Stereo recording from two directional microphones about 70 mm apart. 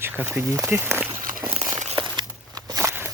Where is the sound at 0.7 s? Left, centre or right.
Right.